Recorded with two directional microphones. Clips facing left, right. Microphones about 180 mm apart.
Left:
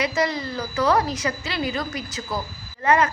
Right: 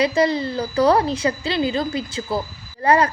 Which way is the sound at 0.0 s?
30° right (ahead or behind).